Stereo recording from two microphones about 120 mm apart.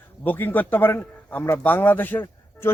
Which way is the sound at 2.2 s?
20° left (ahead or behind).